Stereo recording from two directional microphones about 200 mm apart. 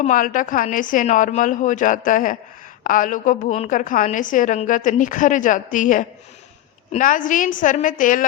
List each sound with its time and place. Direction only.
0.0 s a woman's voice: 40° left (ahead or behind)